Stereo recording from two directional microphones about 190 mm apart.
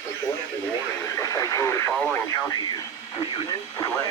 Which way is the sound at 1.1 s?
15° left (ahead or behind).